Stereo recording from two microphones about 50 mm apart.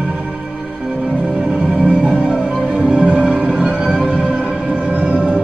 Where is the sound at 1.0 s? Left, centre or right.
Right.